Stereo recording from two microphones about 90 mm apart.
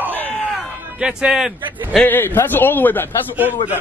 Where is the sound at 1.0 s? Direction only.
10° right (ahead or behind).